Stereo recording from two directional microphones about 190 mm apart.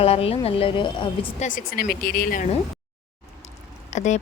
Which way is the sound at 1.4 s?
45° left (ahead or behind).